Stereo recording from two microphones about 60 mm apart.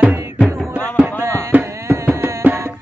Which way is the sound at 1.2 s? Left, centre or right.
Right.